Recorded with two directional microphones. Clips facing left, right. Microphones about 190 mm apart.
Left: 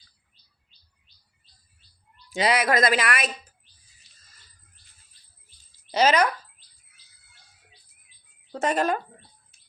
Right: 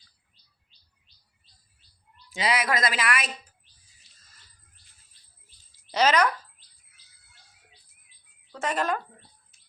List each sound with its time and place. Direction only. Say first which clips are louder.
2.4 s speech: left 4 dB; 55° left (ahead or behind)
5.9 s speech: left 2 dB; 5° left (ahead or behind)
8.5 s speech: left 4 dB; 40° left (ahead or behind)